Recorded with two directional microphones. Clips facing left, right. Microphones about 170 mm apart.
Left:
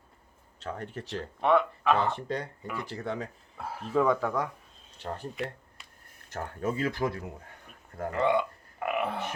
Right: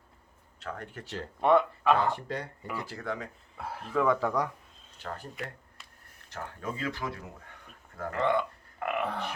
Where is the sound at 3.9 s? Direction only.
20° left (ahead or behind).